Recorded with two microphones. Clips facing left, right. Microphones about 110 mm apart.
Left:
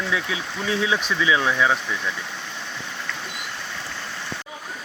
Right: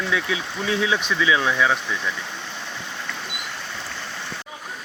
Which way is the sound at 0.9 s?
Centre (ahead or behind).